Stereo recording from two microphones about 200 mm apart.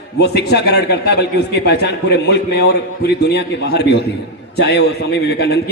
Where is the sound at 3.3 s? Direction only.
55° left (ahead or behind).